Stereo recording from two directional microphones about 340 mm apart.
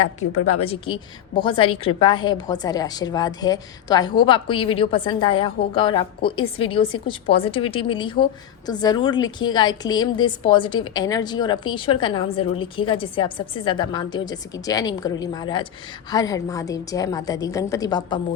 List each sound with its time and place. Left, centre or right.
0.3 s a woman's voice: left
0.6 s a woman's voice: centre